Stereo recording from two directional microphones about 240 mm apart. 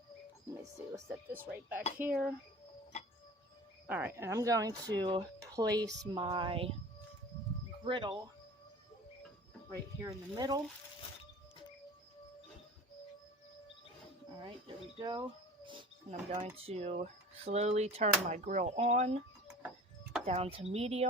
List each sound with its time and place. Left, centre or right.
0.6 s speech: centre
3.8 s speech: centre
7.9 s speech: right
9.6 s speech: centre
14.9 s a sound: centre
16.6 s speech: right
20.2 s speech: right